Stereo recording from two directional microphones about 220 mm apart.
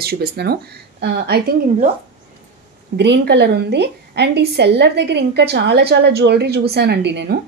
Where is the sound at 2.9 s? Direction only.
50° right (ahead or behind).